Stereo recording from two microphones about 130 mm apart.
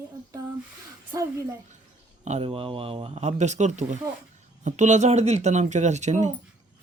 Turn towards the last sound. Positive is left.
turn(degrees=-65)  # may be behind; listen again after turning